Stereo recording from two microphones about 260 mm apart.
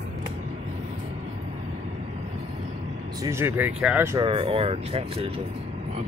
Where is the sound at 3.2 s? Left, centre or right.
Centre.